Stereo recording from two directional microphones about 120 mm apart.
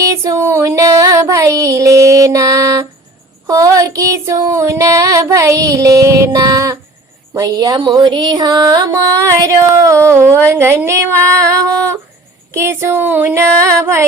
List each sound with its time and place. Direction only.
0.0 s female singing: 25° right (ahead or behind)
7.3 s music: 30° right (ahead or behind)
10.5 s female singing: 20° right (ahead or behind)